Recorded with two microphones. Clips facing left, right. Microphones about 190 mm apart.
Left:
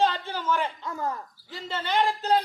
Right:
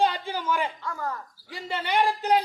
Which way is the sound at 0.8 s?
20° left (ahead or behind).